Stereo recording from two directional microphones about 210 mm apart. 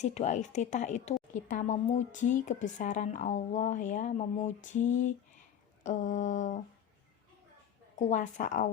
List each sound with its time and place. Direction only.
0.0 s a woman's voice: 30° left (ahead or behind)
7.9 s a woman's voice: 35° left (ahead or behind)